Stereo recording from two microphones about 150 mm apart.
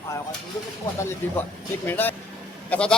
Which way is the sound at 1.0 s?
15° left (ahead or behind).